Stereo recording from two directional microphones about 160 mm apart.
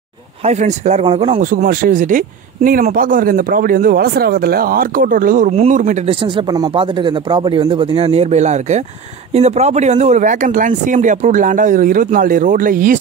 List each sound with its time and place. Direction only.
0.5 s speech: 50° right (ahead or behind)
5.5 s speech: 40° right (ahead or behind); by 13.0 s 60° right (ahead or behind)